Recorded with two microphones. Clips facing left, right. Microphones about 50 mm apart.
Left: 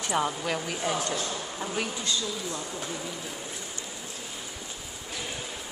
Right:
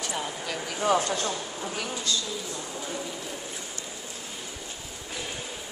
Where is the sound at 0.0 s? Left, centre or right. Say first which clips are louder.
Left 5 dB; left.